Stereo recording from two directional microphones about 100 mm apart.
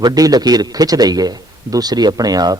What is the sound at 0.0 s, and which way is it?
A man's voice, 40° right (ahead or behind).